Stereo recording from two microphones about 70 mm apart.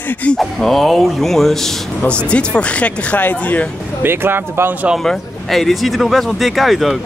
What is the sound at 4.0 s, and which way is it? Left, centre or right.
Speech, right.